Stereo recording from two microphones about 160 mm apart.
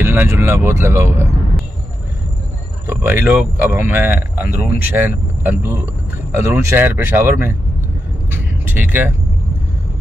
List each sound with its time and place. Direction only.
0.0 s speech: 15° right (ahead or behind)
2.9 s speech: 15° right (ahead or behind)
8.3 s vehicle: 15° right (ahead or behind)